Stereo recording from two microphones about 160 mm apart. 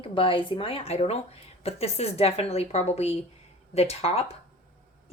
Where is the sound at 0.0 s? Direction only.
35° left (ahead or behind).